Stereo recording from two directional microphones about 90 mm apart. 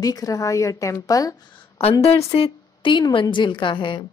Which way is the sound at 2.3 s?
80° left.